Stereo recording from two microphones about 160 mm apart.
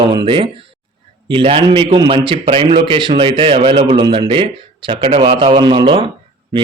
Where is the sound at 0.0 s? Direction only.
30° right (ahead or behind).